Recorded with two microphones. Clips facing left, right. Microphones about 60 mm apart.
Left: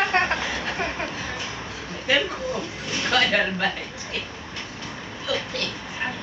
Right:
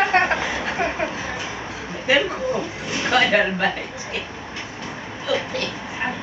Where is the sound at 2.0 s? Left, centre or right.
Centre.